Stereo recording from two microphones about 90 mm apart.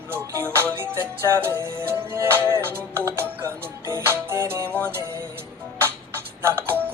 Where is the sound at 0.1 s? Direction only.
25° right (ahead or behind).